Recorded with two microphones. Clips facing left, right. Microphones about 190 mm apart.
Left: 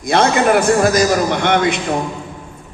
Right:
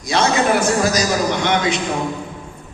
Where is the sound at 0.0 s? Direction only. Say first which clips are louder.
Left 3 dB; 55° left (ahead or behind).